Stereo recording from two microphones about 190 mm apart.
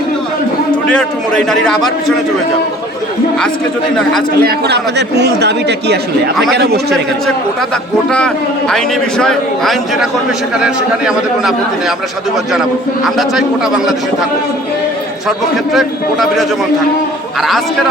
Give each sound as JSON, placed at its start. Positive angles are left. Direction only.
{"t": 1.5, "sound": "a man's voice", "side_deg": 0}
{"t": 4.4, "sound": "speech", "side_deg": -55}
{"t": 6.3, "sound": "a man's voice", "side_deg": 0}
{"t": 8.7, "sound": "a man's voice", "side_deg": 5}
{"t": 13.1, "sound": "a man's voice", "side_deg": 0}